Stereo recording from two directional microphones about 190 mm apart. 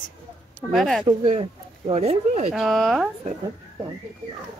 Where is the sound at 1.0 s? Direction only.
25° right (ahead or behind).